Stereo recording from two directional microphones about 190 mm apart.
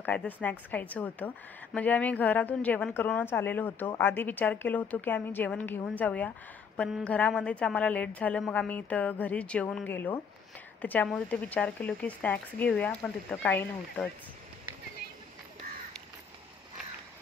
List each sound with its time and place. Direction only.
0.0 s a woman's voice: 10° left (ahead or behind)